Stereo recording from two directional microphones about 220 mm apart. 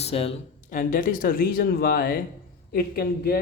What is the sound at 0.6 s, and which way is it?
Speech, 40° left (ahead or behind).